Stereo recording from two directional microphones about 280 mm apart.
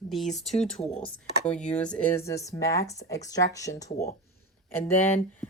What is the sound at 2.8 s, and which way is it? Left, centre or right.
Speech, left.